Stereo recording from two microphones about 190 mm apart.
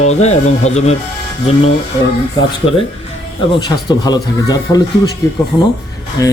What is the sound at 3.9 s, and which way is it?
Speech, 20° left (ahead or behind).